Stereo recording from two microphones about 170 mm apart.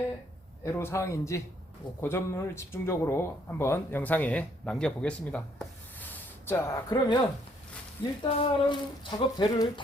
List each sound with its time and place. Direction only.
0.6 s speech: 15° left (ahead or behind)
6.9 s speech: 25° left (ahead or behind)
8.4 s speech: 30° left (ahead or behind)